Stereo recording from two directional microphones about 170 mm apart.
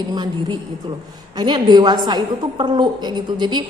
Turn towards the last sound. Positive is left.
turn(degrees=-25)  # may be behind; listen again after turning